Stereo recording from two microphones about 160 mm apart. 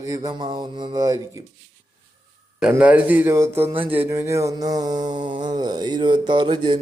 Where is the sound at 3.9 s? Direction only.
15° right (ahead or behind).